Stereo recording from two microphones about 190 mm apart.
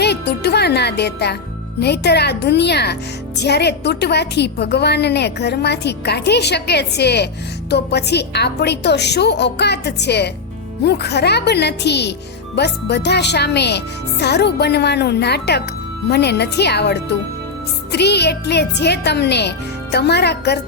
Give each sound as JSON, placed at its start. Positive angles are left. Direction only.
{"t": 0.0, "sound": "a woman's voice", "side_deg": 60}